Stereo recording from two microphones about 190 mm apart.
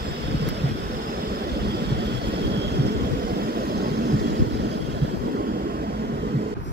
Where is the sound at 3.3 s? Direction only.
55° right (ahead or behind).